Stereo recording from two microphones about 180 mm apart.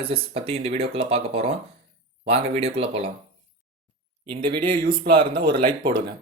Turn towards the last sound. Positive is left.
turn(degrees=-25)  # may be behind; listen again after turning